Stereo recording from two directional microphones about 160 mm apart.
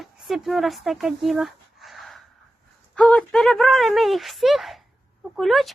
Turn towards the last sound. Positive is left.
turn(degrees=0)  # may be behind; listen again after turning